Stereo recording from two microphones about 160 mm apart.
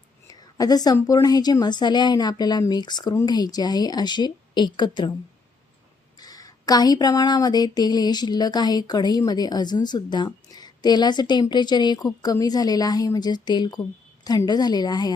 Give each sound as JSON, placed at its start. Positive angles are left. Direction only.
{"t": 0.3, "sound": "speech", "side_deg": 25}
{"t": 6.1, "sound": "speech", "side_deg": 25}